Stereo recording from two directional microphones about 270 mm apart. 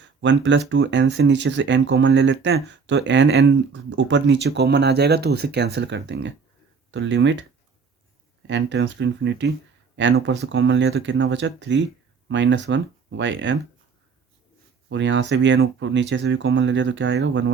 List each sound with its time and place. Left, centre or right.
0.0 s speech: right
8.4 s speech: right
14.8 s speech: right